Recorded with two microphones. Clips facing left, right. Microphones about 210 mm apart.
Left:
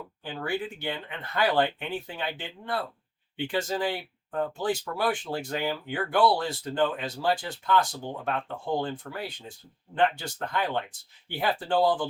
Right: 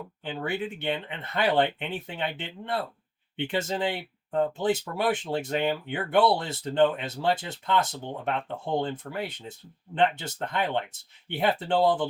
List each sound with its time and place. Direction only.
0.3 s speech: 20° right (ahead or behind)
3.3 s speech: 25° right (ahead or behind)